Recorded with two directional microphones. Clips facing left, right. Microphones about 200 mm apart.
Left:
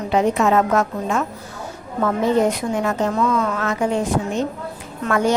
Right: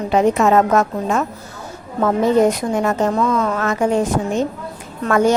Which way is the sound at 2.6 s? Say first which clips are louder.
Right 3 dB; 45° right (ahead or behind).